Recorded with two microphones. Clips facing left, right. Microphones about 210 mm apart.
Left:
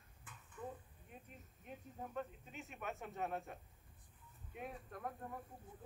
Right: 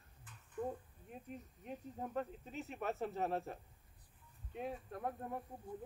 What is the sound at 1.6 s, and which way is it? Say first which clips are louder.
Speech: right 4 dB; 40° right (ahead or behind).